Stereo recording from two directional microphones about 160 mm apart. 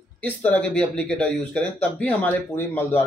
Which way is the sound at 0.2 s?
10° left (ahead or behind).